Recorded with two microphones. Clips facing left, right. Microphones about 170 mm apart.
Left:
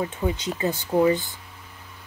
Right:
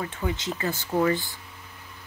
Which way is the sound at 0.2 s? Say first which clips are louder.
Left 2 dB; 15° left (ahead or behind).